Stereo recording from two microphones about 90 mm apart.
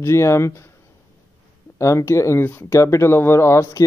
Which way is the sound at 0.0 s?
30° left (ahead or behind).